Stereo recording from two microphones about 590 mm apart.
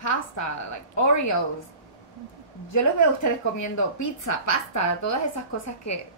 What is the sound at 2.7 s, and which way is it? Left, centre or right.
A woman's voice, left.